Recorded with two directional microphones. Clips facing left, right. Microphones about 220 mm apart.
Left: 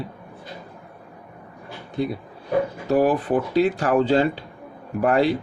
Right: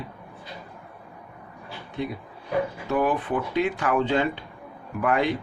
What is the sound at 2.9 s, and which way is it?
Speech, 35° left (ahead or behind).